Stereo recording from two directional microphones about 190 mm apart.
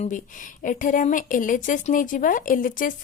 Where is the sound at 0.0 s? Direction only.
45° left (ahead or behind).